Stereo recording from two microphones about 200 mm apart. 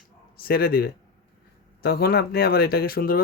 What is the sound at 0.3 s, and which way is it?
A man's voice, 50° left (ahead or behind).